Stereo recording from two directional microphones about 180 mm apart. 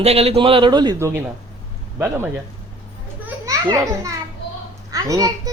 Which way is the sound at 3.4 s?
20° right (ahead or behind).